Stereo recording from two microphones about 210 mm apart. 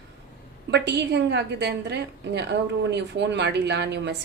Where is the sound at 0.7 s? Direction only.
55° right (ahead or behind).